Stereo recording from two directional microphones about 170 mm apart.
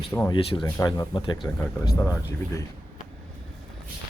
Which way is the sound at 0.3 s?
25° left (ahead or behind).